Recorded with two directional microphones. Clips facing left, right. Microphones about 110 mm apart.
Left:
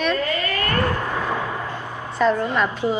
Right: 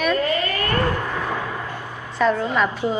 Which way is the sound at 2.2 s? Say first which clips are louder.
Even; centre (ahead or behind).